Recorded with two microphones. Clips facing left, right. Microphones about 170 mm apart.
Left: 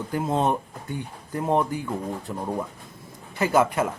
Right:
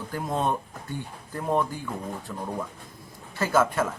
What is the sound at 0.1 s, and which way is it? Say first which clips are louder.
A man's voice: left 4 dB; 20° left (ahead or behind).